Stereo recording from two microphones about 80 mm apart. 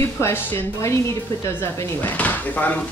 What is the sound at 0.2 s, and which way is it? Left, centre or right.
Speech, left.